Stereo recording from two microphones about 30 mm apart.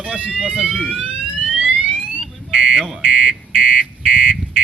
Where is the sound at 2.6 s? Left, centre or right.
Centre.